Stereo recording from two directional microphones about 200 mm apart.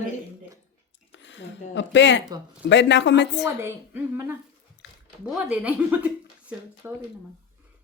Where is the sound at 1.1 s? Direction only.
65° left (ahead or behind).